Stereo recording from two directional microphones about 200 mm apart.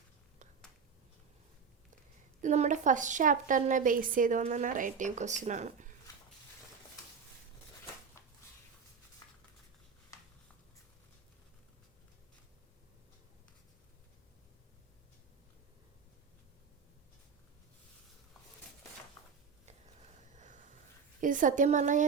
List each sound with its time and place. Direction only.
2.4 s a woman's voice: 35° right (ahead or behind)
19.6 s a sound: 35° right (ahead or behind)
21.2 s a woman's voice: 40° right (ahead or behind)